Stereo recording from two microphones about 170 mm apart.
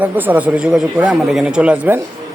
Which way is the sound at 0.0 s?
10° right (ahead or behind).